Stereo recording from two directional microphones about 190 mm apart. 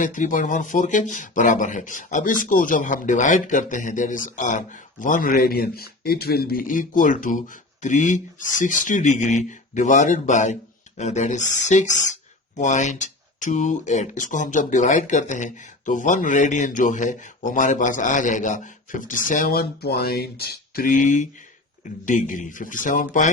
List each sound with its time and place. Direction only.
0.0 s speech: 40° left (ahead or behind)